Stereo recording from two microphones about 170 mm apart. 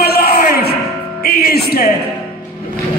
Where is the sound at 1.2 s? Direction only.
60° left (ahead or behind).